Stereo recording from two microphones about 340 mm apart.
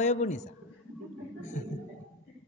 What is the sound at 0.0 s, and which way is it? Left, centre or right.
Speech, left.